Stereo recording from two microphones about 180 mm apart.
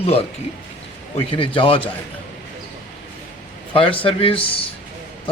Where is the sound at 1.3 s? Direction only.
30° left (ahead or behind).